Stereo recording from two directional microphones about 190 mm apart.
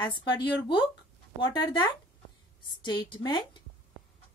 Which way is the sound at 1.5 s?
25° left (ahead or behind).